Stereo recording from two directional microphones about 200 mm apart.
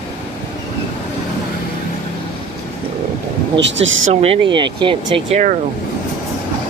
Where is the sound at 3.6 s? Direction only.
65° right (ahead or behind).